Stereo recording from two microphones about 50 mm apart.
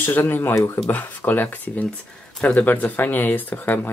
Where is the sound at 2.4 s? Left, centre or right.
Left.